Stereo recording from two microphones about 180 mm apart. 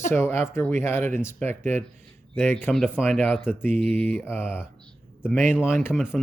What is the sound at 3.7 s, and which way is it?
Mantra, 10° left (ahead or behind).